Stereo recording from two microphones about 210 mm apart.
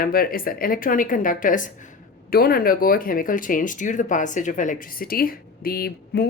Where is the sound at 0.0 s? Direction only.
45° left (ahead or behind).